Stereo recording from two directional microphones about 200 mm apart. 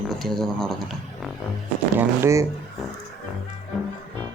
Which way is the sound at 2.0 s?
15° right (ahead or behind).